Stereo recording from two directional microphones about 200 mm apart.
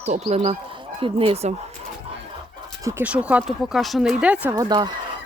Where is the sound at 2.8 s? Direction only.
10° right (ahead or behind).